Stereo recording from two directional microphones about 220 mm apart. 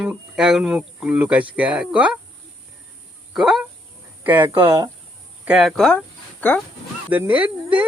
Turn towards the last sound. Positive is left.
turn(degrees=-5)  # may be behind; listen again after turning